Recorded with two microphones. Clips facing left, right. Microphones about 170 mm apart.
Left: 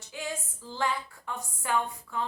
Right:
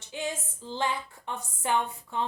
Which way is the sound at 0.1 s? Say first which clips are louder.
Right 3 dB; 25° right (ahead or behind).